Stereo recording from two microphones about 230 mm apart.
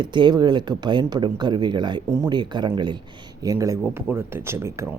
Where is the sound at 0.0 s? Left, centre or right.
Centre.